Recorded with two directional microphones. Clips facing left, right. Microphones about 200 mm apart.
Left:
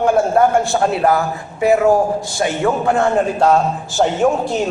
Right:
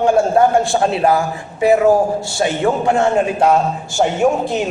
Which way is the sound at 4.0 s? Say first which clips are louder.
Even; 15° right (ahead or behind).